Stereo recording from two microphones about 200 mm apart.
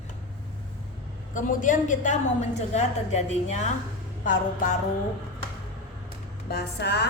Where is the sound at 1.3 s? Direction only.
40° left (ahead or behind).